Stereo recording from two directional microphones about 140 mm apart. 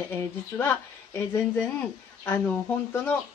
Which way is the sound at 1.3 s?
10° left (ahead or behind).